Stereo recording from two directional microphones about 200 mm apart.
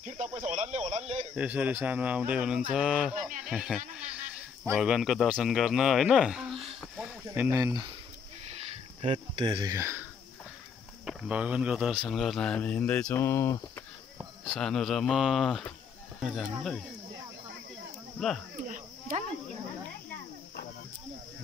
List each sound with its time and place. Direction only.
0.0 s speech: 35° right (ahead or behind)
1.3 s a man's voice: 5° right (ahead or behind)
3.2 s speech: 40° right (ahead or behind)
3.4 s a man's voice: centre (ahead or behind)
7.2 s speech: 15° right (ahead or behind)
9.0 s speech: 30° right (ahead or behind); by 10.0 s 15° right (ahead or behind)
11.1 s a man's voice: 5° right (ahead or behind); by 13.8 s 15° left (ahead or behind)
14.1 s a man's voice: centre (ahead or behind)
18.7 s a sound: 40° right (ahead or behind)